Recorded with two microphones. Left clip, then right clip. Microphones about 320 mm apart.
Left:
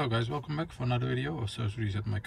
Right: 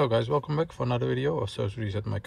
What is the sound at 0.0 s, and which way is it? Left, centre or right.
Speech, centre.